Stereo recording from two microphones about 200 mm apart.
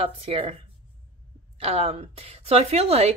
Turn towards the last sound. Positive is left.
turn(degrees=-30)  # may be behind; listen again after turning